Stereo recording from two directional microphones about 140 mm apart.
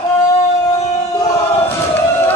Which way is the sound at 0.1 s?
25° left (ahead or behind).